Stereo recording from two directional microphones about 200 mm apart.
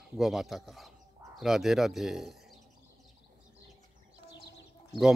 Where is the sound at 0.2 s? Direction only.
Centre (ahead or behind).